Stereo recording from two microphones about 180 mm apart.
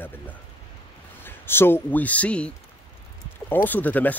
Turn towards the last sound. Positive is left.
turn(degrees=10)  # may be behind; listen again after turning